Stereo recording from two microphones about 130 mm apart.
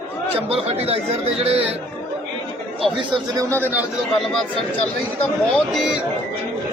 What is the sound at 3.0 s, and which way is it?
Speech, 35° right (ahead or behind).